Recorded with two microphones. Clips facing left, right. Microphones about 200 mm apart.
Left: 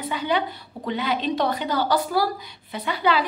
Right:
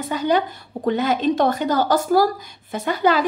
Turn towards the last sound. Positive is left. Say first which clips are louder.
# right 4 dB
turn(degrees=-45)  # may be behind; listen again after turning